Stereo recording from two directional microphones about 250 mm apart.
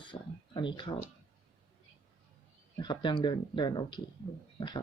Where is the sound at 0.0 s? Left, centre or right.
Centre.